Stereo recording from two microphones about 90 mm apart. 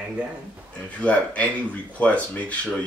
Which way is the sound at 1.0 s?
15° left (ahead or behind).